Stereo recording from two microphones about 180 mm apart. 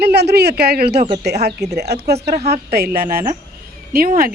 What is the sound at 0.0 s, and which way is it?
A woman's voice, 65° right (ahead or behind).